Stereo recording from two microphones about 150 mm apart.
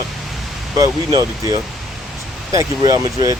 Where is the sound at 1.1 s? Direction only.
25° right (ahead or behind).